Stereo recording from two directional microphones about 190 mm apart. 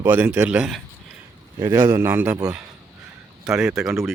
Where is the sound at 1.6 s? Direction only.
20° right (ahead or behind).